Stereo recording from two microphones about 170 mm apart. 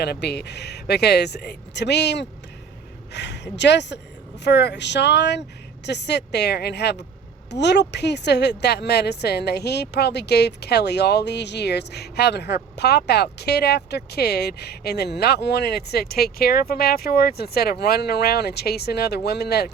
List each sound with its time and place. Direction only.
0.0 s speech: 75° left (ahead or behind)
7.5 s speech: 85° left; by 19.7 s 70° left (ahead or behind)